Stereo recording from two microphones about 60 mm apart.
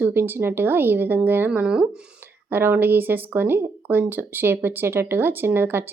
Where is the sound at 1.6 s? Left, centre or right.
Centre.